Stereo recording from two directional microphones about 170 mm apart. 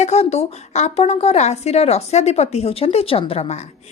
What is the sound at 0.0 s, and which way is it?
A woman's voice, 40° left (ahead or behind).